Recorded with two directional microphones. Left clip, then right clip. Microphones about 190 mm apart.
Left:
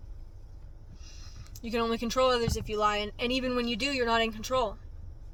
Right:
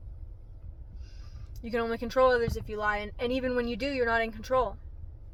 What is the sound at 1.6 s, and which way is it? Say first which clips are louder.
Speech: left 1 dB; 15° left (ahead or behind).